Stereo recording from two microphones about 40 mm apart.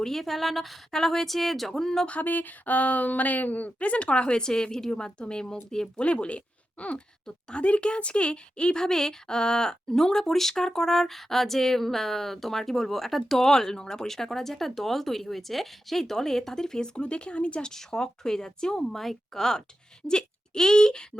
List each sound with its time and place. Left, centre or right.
0.0 s a woman's voice: centre
2.0 s speech: left; by 5.9 s centre
6.0 s speech: left
17.7 s speech: centre